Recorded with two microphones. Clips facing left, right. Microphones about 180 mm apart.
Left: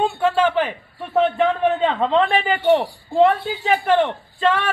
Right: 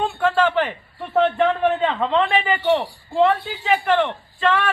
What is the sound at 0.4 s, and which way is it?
Chuckle, 10° left (ahead or behind).